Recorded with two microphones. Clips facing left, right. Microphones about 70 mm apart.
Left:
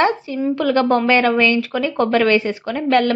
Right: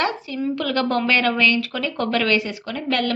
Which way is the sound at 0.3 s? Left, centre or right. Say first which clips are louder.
Left 5 dB; left.